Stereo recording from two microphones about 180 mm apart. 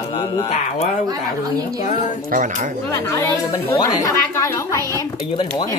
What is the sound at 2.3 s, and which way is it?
Speech, 45° right (ahead or behind).